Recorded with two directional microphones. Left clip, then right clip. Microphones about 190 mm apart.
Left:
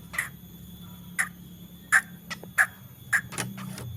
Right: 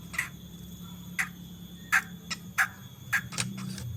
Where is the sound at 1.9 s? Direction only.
25° left (ahead or behind).